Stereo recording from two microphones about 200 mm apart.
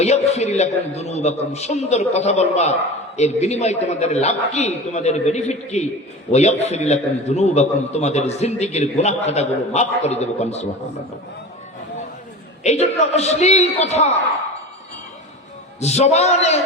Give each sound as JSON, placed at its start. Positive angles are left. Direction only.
{"t": 0.0, "sound": "a man's voice", "side_deg": 35}
{"t": 12.6, "sound": "a man's voice", "side_deg": 35}
{"t": 15.8, "sound": "a man's voice", "side_deg": 35}